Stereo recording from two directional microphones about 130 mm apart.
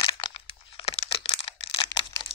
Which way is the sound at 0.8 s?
50° left (ahead or behind).